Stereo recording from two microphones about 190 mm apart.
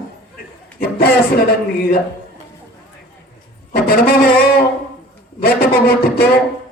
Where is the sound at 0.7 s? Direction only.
55° left (ahead or behind).